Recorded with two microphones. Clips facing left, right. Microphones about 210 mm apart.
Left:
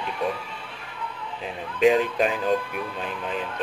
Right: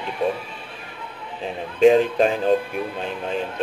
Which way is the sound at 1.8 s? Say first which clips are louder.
Right 5 dB; 30° right (ahead or behind).